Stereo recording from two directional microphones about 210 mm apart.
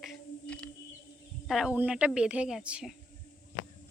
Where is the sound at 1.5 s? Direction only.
5° right (ahead or behind).